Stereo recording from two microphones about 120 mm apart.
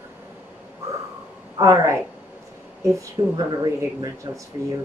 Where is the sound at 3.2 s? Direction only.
35° right (ahead or behind).